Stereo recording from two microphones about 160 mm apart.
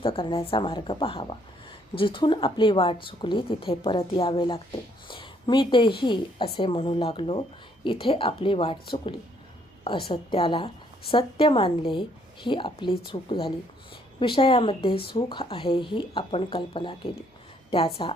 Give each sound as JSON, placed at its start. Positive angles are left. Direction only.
{"t": 0.0, "sound": "a woman's voice", "side_deg": 35}